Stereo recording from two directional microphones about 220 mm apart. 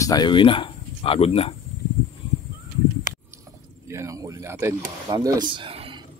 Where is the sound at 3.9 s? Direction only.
15° right (ahead or behind).